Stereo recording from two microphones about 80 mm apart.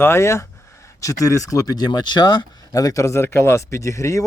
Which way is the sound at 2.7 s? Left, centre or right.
Left.